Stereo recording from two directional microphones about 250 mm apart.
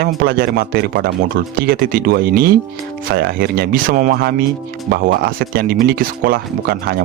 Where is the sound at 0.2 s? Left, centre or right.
Right.